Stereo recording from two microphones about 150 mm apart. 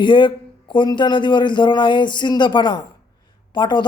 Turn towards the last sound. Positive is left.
turn(degrees=30)  # may be behind; listen again after turning